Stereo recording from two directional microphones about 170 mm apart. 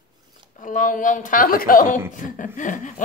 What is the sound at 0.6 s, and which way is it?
A woman's voice, 50° left (ahead or behind).